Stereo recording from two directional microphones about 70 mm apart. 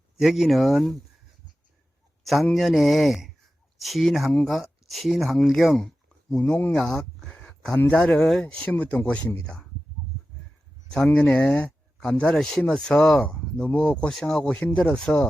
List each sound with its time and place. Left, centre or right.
0.2 s speech: centre
2.2 s speech: centre
7.3 s a sound: centre
7.9 s speech: centre
11.1 s speech: centre
12.1 s speech: centre
14.1 s speech: centre